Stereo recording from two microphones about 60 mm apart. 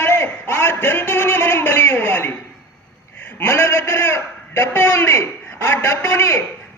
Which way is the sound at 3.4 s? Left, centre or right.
Left.